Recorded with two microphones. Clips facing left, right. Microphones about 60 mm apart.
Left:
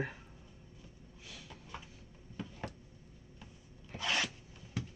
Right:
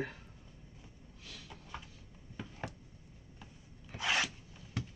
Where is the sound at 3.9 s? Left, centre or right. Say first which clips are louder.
Right 2 dB; centre.